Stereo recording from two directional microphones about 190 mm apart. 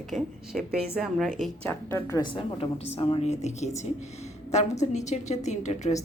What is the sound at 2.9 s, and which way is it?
Speech, 35° left (ahead or behind).